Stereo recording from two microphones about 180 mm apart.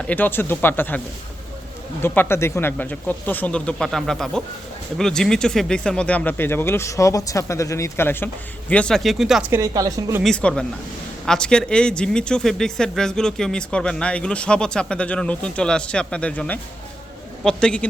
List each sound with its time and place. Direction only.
0.1 s speech: 10° left (ahead or behind)
9.5 s speech: 20° right (ahead or behind)
10.2 s speech: 5° left (ahead or behind)